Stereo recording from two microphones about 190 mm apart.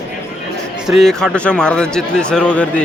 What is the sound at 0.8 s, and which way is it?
A man's voice, centre (ahead or behind).